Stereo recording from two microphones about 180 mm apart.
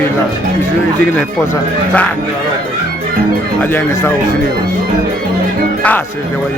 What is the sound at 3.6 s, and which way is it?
Speech, 10° left (ahead or behind).